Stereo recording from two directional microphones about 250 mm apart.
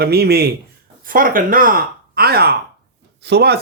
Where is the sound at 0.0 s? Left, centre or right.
Right.